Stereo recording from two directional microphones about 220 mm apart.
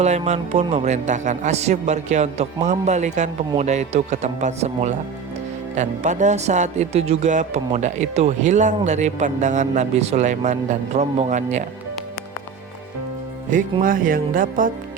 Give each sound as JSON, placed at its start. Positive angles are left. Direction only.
{"t": 0.0, "sound": "speech", "side_deg": -30}
{"t": 13.5, "sound": "speech", "side_deg": -35}